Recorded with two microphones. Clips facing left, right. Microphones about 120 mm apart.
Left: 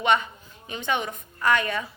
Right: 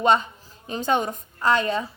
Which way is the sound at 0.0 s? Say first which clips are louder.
Right 3 dB; 30° right (ahead or behind).